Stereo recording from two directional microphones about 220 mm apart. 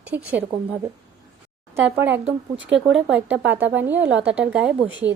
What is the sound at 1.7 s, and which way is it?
A woman's voice, 10° right (ahead or behind).